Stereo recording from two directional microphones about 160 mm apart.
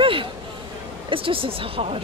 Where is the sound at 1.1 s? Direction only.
35° right (ahead or behind).